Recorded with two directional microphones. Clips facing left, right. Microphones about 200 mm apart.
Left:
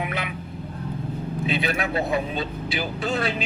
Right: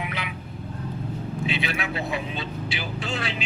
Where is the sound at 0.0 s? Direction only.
50° left (ahead or behind).